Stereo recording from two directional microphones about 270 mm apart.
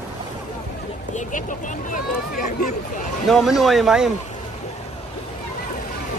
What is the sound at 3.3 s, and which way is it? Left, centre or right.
Speech, centre.